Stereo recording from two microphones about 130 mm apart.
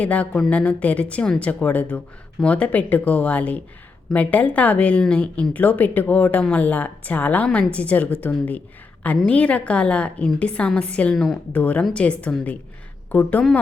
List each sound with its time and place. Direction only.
0.0 s speech: 10° left (ahead or behind)
11.5 s speech: 15° left (ahead or behind)